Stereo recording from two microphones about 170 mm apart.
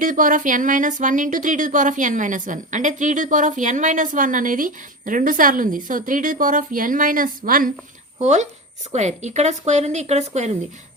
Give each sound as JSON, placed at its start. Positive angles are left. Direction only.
{"t": 0.0, "sound": "speech", "side_deg": -50}
{"t": 8.2, "sound": "speech", "side_deg": -45}